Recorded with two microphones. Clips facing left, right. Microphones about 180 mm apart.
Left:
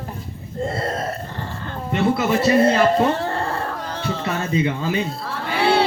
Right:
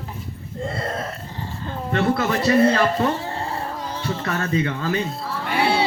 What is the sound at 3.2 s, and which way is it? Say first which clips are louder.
Baby cry: left 4 dB; 60° left (ahead or behind).